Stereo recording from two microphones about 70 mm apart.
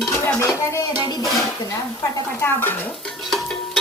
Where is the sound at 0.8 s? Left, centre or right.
Left.